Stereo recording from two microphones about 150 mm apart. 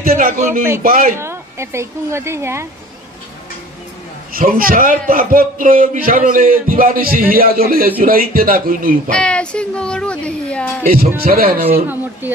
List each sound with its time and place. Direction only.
0.0 s a man's voice: 70° right (ahead or behind)
1.1 s a woman's voice: 15° right (ahead or behind)
4.3 s a man's voice: 70° right (ahead or behind)
9.1 s speech: 5° left (ahead or behind)
10.9 s a man's voice: 80° right